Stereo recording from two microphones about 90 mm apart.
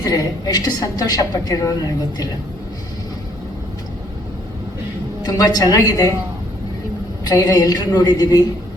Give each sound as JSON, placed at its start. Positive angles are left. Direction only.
{"t": 0.0, "sound": "a woman's voice", "side_deg": 45}
{"t": 5.2, "sound": "a woman's voice", "side_deg": 45}
{"t": 7.3, "sound": "a woman's voice", "side_deg": 45}